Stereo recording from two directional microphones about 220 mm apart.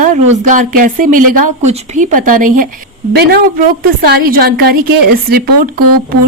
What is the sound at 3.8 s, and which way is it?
A woman's voice, 45° right (ahead or behind).